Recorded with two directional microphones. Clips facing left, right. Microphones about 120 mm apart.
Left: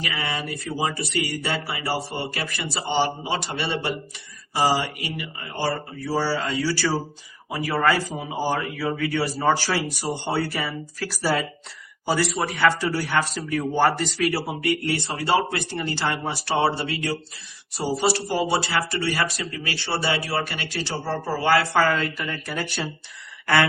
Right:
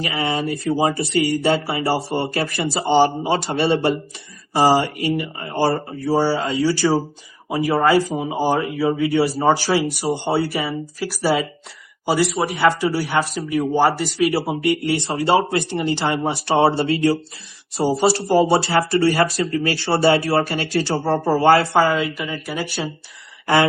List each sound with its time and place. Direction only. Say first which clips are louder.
0.0 s speech: right 7 dB; 30° right (ahead or behind)
6.1 s speech: right 5 dB; 20° right (ahead or behind)
14.2 s speech: right 5 dB; 15° right (ahead or behind)
22.0 s speech: right 4 dB; 5° right (ahead or behind)